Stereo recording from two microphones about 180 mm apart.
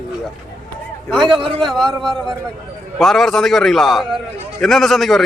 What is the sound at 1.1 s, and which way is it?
A man's voice, centre (ahead or behind).